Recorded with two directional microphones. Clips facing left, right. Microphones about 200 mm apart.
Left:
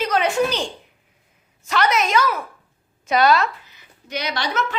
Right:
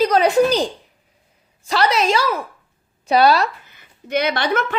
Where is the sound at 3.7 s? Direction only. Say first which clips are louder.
Right 8 dB; 55° right (ahead or behind).